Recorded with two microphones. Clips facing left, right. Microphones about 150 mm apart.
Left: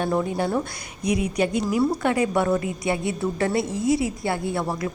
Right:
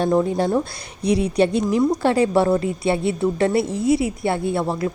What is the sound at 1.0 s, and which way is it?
A woman's voice, 30° right (ahead or behind).